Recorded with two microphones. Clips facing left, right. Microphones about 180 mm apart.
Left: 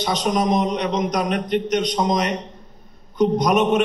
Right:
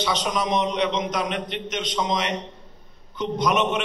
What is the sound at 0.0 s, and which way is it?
A man's voice, 45° left (ahead or behind).